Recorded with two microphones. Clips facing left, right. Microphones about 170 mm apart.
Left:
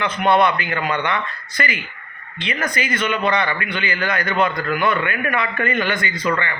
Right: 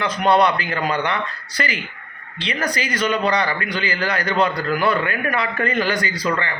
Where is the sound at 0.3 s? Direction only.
35° right (ahead or behind).